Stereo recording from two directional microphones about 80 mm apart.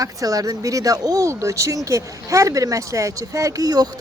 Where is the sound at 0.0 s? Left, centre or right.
Right.